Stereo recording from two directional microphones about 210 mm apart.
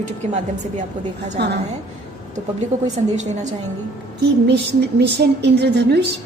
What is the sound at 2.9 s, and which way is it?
Speech, 35° right (ahead or behind).